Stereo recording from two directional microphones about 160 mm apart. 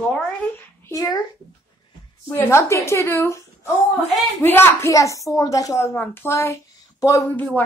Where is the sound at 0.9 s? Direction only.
25° left (ahead or behind).